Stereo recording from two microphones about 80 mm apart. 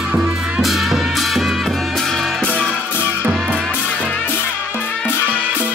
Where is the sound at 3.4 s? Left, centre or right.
Centre.